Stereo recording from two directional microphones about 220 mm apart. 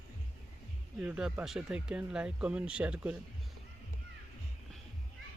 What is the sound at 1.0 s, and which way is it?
Speech, 5° right (ahead or behind).